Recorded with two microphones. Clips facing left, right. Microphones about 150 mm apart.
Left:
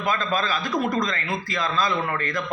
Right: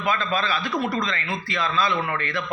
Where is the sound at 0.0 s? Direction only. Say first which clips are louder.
Even; 40° left (ahead or behind).